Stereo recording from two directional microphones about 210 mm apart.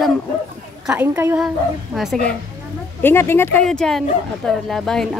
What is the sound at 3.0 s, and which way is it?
Speech, 10° left (ahead or behind).